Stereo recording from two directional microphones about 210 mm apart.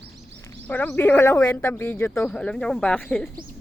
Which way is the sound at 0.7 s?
10° left (ahead or behind).